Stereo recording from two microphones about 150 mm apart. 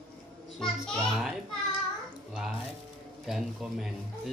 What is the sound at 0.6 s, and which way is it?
Speech, 5° left (ahead or behind).